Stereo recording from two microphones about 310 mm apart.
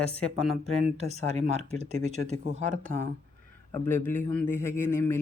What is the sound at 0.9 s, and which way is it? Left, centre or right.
Speech, right.